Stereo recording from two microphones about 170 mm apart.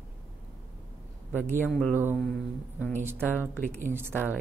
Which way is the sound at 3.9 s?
10° right (ahead or behind).